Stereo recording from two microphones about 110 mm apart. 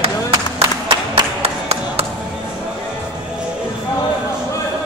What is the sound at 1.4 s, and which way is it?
Music, 65° right (ahead or behind).